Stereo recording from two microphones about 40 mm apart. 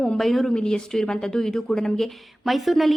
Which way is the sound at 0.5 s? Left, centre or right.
Centre.